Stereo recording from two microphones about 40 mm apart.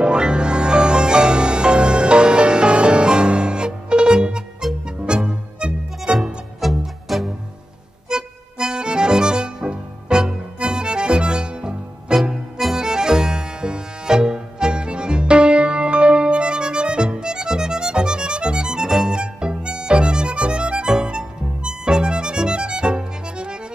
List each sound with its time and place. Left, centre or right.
0.0 s music: right
6.6 s music: centre
8.1 s accordion: centre
12.7 s music: centre